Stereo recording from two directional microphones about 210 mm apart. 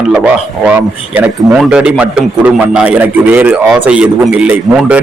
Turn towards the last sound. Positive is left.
turn(degrees=-5)  # may be behind; listen again after turning